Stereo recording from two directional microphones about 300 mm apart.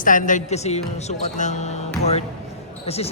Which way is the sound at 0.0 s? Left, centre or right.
Left.